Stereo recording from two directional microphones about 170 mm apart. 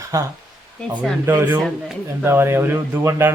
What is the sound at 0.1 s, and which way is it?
A man's voice, 15° right (ahead or behind).